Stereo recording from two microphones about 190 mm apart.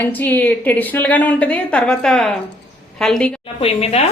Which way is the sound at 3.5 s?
30° left (ahead or behind).